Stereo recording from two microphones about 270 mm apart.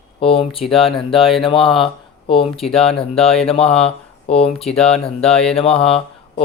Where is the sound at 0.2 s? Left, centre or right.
Centre.